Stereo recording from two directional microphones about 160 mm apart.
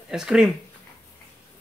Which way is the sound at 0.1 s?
5° right (ahead or behind).